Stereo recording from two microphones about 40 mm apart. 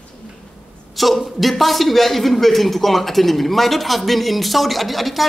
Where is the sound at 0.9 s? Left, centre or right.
Centre.